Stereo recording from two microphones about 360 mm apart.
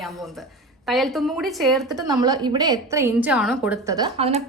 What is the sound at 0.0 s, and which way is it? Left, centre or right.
A woman's voice, centre.